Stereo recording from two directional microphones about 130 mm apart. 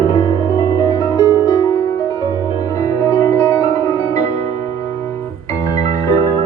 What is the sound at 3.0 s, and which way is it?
Music, 25° left (ahead or behind).